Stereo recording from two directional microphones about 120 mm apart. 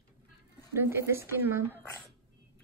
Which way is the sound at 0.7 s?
20° right (ahead or behind).